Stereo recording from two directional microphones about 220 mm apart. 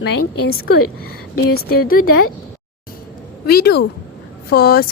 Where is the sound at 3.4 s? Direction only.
45° left (ahead or behind).